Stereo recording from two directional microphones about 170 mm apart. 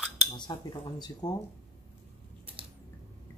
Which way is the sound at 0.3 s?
25° left (ahead or behind).